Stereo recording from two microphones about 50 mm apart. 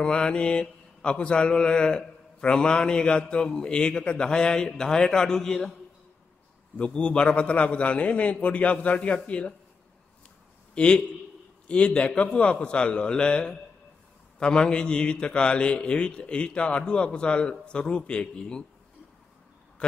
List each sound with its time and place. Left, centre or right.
0.0 s mantra: left
6.8 s a man's voice: left
10.7 s a man's voice: left